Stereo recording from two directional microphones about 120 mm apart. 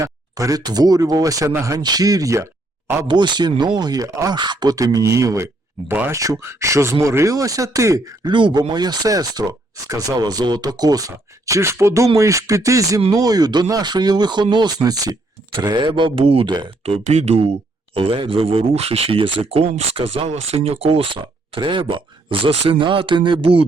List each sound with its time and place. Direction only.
0.0 s speech: 30° right (ahead or behind)
3.1 s speech: 40° right (ahead or behind)